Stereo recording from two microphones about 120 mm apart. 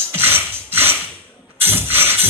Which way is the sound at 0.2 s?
20° right (ahead or behind).